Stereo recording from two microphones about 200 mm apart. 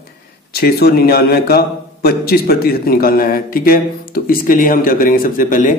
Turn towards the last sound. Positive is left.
turn(degrees=45)  # may be behind; listen again after turning